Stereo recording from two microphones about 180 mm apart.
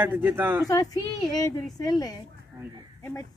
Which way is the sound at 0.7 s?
20° left (ahead or behind).